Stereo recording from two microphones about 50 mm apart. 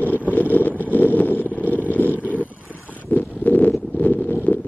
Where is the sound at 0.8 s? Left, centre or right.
Left.